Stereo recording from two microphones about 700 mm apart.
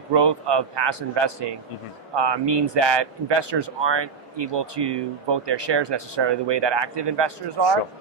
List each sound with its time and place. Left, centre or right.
0.1 s speech: right